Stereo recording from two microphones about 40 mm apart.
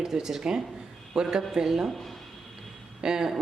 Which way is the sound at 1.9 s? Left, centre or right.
Centre.